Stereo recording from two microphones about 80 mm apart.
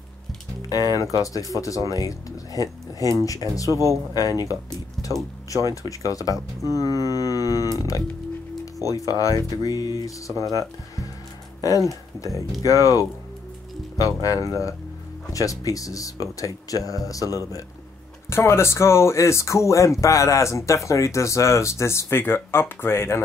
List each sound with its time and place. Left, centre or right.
0.6 s speech: left
6.7 s a sound: left
8.7 s speech: left
18.3 s speech: left